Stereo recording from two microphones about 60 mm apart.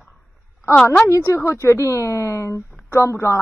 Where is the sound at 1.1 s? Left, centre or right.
Left.